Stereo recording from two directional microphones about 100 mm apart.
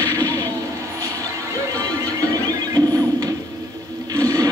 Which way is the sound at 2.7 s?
40° right (ahead or behind).